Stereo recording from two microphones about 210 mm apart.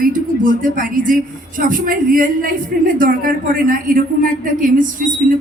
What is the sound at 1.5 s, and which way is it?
A woman's voice, 40° right (ahead or behind).